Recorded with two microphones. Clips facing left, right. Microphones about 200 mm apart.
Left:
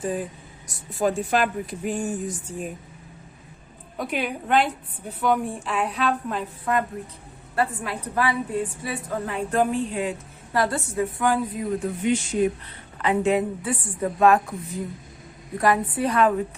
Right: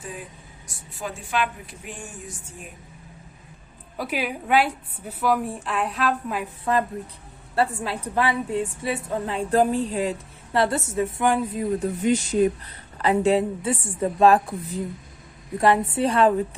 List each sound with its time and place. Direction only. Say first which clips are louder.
0.9 s speech: left 6 dB; 40° left (ahead or behind)
3.9 s a woman's voice: even; 5° right (ahead or behind)
6.7 s a woman's voice: right 1 dB; 30° right (ahead or behind)
12.0 s a woman's voice: right 2 dB; 40° right (ahead or behind)